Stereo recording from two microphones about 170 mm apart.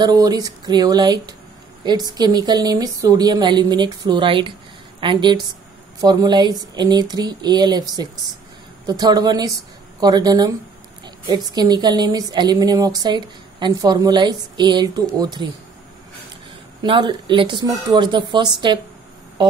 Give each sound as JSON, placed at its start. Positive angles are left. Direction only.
{"t": 0.0, "sound": "a woman's voice", "side_deg": -20}
{"t": 16.8, "sound": "a woman's voice", "side_deg": -30}